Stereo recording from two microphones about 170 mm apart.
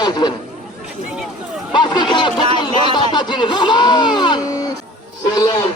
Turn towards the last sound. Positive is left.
turn(degrees=20)  # may be behind; listen again after turning